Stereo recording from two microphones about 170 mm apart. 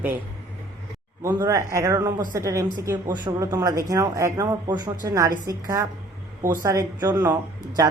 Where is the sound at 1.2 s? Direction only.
20° right (ahead or behind).